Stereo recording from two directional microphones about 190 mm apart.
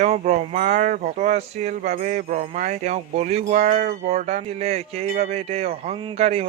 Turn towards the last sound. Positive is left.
turn(degrees=-35)  # may be behind; listen again after turning